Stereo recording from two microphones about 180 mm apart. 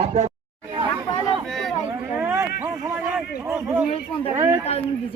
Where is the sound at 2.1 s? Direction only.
10° right (ahead or behind).